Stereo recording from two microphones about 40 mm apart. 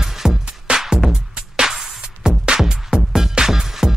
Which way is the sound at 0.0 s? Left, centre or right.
Centre.